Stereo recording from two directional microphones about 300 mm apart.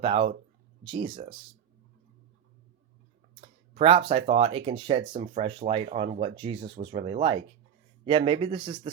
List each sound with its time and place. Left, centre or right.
0.0 s speech: centre
3.4 s a sound: centre
4.3 s speech: centre